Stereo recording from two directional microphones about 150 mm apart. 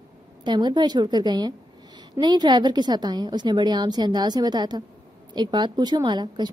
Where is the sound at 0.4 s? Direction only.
30° right (ahead or behind).